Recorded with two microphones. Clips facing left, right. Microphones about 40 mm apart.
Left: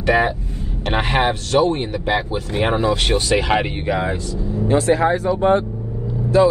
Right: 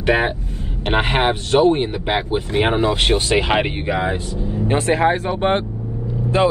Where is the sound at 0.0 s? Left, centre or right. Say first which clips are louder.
Left 1 dB; right.